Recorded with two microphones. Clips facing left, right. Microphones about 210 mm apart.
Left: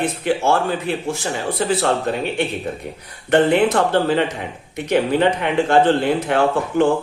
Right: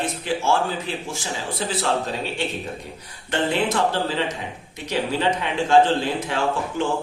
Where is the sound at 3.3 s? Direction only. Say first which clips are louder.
Left 8 dB; 60° left (ahead or behind).